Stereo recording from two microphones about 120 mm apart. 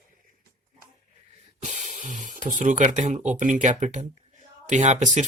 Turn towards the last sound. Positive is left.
turn(degrees=-90)